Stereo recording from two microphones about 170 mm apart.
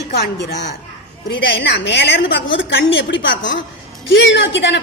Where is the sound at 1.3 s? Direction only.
70° left (ahead or behind).